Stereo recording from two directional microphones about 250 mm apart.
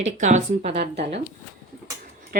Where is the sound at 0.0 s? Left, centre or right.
Right.